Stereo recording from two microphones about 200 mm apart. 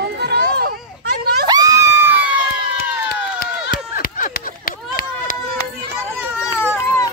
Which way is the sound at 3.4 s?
45° left (ahead or behind).